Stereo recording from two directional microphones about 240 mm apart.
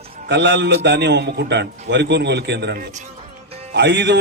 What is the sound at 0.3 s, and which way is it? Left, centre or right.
A man's voice, right.